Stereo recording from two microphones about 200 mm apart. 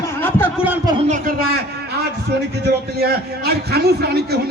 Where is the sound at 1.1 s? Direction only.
45° right (ahead or behind).